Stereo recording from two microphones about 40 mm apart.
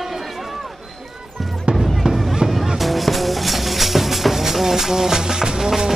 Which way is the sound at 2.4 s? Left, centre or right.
Centre.